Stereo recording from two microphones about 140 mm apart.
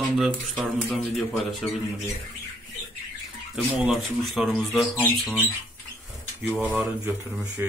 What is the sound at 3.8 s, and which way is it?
Speech, 5° right (ahead or behind).